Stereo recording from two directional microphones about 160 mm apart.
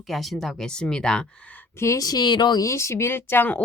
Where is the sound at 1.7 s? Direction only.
20° left (ahead or behind).